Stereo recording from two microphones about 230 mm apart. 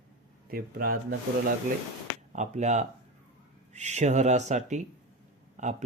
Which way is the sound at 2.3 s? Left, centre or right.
Right.